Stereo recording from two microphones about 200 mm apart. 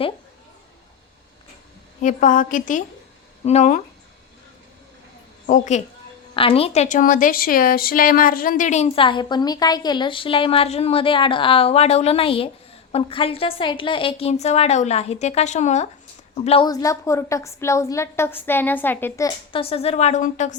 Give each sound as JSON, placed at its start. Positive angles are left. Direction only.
{"t": 2.0, "sound": "a woman's voice", "side_deg": 40}
{"t": 5.5, "sound": "a woman's voice", "side_deg": 40}
{"t": 6.3, "sound": "a woman's voice", "side_deg": 25}
{"t": 19.5, "sound": "a woman's voice", "side_deg": 30}